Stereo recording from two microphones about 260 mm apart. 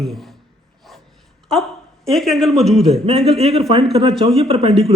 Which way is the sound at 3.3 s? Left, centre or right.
Right.